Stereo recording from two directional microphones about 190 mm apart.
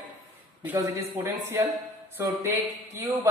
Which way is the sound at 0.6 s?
10° right (ahead or behind).